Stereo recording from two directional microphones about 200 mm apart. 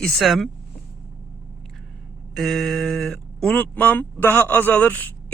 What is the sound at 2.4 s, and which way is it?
Speech, centre (ahead or behind).